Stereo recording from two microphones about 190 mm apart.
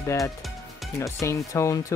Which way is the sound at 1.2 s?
15° left (ahead or behind).